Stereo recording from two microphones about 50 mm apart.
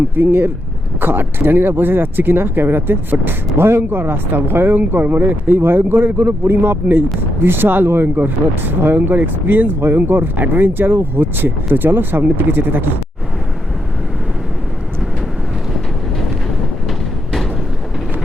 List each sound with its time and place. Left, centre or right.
0.2 s speech: right